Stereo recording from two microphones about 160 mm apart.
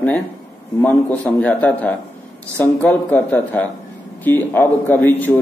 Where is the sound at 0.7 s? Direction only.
10° left (ahead or behind).